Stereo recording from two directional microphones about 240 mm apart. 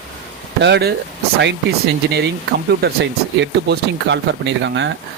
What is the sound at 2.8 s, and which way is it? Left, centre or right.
Speech, right.